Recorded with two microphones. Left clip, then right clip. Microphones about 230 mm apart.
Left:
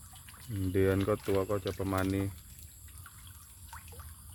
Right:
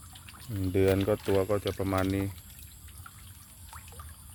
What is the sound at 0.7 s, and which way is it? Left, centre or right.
Speech, centre.